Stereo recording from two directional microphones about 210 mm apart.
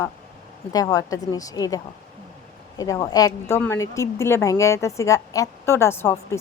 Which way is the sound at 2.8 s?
15° left (ahead or behind).